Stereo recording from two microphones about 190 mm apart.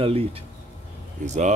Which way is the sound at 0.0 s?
30° right (ahead or behind).